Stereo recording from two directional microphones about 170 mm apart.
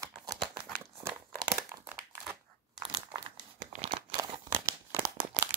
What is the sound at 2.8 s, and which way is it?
Crumpling, 25° right (ahead or behind).